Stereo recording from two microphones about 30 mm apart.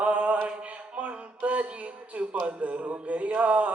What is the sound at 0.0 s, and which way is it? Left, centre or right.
Music, right.